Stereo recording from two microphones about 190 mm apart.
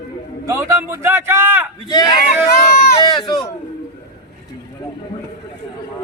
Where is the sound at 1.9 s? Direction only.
20° left (ahead or behind).